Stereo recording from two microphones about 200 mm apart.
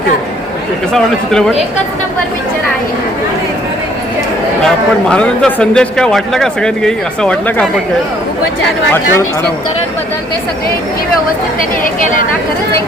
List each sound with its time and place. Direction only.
0.9 s a man's voice: 5° left (ahead or behind)
4.6 s a man's voice: 5° left (ahead or behind)
11.8 s speech: 40° left (ahead or behind)